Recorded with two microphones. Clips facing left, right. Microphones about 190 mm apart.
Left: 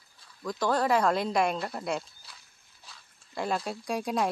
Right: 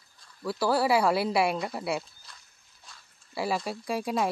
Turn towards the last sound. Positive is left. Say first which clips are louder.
# right 1 dB
turn(degrees=0)  # may be behind; listen again after turning